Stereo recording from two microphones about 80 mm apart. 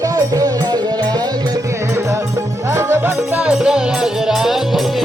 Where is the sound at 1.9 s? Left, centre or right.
Right.